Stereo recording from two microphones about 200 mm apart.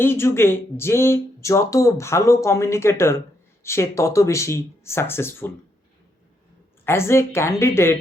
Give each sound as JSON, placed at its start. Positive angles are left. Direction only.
{"t": 0.0, "sound": "speech", "side_deg": 10}
{"t": 6.8, "sound": "speech", "side_deg": 15}